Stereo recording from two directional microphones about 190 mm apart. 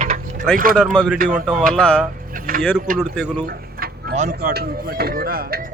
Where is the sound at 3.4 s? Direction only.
50° right (ahead or behind).